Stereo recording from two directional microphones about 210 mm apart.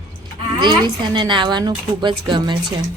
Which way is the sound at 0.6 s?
20° right (ahead or behind).